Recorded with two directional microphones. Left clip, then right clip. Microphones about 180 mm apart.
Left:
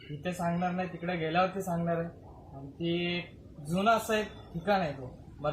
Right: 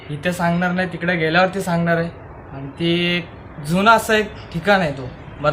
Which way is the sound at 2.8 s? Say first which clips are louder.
Right 13 dB; 15° right (ahead or behind).